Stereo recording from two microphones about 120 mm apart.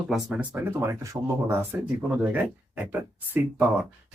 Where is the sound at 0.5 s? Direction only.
20° right (ahead or behind).